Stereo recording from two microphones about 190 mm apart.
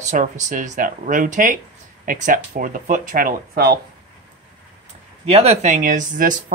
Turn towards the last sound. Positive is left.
turn(degrees=-45)  # may be behind; listen again after turning